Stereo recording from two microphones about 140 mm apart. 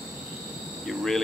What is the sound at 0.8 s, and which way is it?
Speech, centre (ahead or behind).